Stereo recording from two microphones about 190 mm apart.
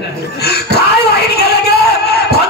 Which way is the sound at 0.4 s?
60° left (ahead or behind).